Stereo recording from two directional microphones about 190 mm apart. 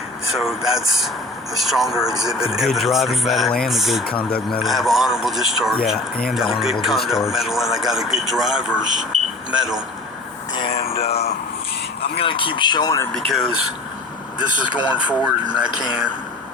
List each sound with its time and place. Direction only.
0.3 s speech: centre (ahead or behind)
10.5 s a sound: 30° left (ahead or behind)
12.1 s speech: 25° left (ahead or behind)
13.1 s speech: centre (ahead or behind)
14.8 s speech: 5° right (ahead or behind)